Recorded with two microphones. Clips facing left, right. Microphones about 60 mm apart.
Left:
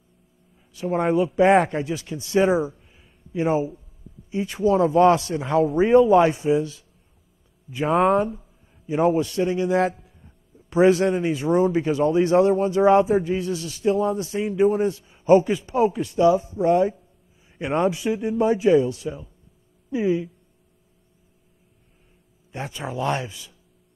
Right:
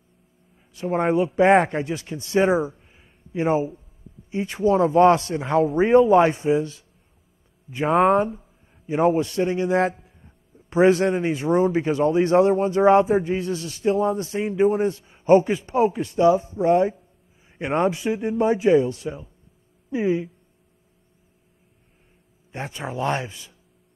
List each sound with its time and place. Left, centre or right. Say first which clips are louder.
0.6 s a man's voice: even; right
22.5 s speech: even; right